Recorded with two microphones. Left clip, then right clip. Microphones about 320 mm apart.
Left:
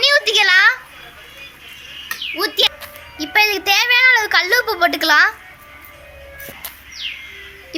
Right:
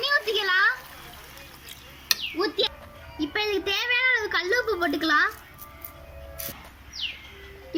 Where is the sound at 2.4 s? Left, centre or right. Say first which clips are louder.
Left 12 dB; left.